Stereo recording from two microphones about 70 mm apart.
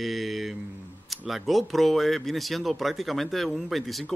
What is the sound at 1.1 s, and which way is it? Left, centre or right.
Speech, centre.